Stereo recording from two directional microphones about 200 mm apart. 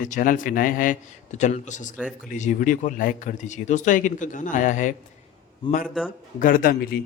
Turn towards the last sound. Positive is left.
turn(degrees=45)  # may be behind; listen again after turning